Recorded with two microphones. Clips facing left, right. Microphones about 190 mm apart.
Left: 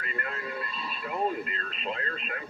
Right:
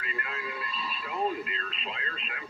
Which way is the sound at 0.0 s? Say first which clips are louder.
Left 2 dB; 45° left (ahead or behind).